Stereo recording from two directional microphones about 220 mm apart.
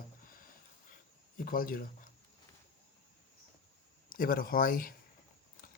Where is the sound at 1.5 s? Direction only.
40° left (ahead or behind).